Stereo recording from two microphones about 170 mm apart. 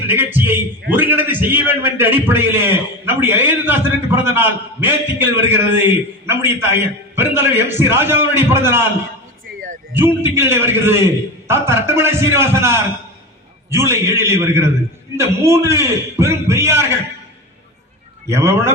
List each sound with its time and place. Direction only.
0.1 s a man's voice: 10° right (ahead or behind)
9.9 s a man's voice: 15° right (ahead or behind)
18.3 s a man's voice: 15° right (ahead or behind)